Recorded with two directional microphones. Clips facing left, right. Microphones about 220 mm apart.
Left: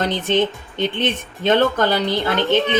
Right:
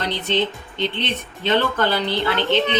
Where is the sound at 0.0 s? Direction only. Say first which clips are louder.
Left 4 dB; 50° left (ahead or behind).